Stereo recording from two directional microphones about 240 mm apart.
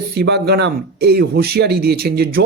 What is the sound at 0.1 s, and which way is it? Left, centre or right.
Speech, right.